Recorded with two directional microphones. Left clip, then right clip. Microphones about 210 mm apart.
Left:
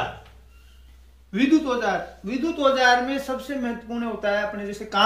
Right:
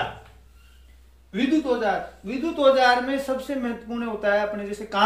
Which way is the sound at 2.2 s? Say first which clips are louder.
Right 3 dB; 20° right (ahead or behind).